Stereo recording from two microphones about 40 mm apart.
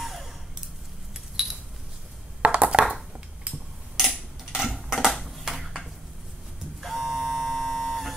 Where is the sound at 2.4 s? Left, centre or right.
Right.